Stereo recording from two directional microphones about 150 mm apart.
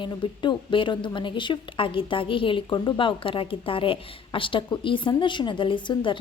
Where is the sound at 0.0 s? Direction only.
35° left (ahead or behind).